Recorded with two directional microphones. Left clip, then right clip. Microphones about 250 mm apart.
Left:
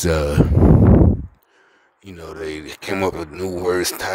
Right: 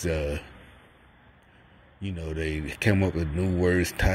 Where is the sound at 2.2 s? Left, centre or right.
Left.